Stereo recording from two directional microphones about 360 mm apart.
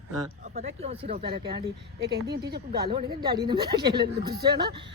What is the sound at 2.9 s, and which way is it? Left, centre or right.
A man's voice, centre.